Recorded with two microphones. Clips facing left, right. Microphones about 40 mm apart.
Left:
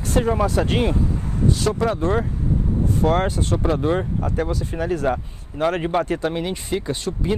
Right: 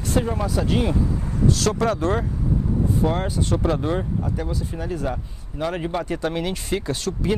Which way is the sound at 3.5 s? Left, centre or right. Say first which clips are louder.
Left 2 dB; left.